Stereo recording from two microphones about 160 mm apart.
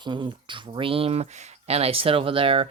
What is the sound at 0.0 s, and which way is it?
Speech, 30° right (ahead or behind).